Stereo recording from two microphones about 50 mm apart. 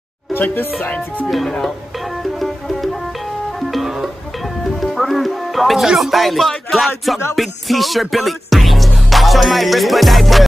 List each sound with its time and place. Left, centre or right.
0.3 s speech: left
1.3 s speech: centre
2.3 s music: centre
5.9 s speech: centre
7.3 s music: centre